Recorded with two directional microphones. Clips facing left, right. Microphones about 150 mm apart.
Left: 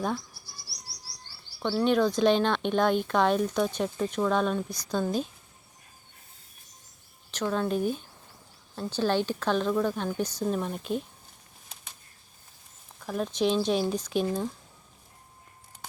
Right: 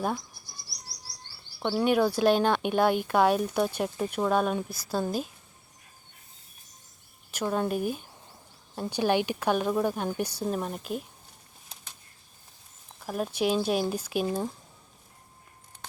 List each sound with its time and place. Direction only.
1.5 s speech: 15° right (ahead or behind)
7.3 s speech: 10° right (ahead or behind)
13.0 s speech: 10° right (ahead or behind)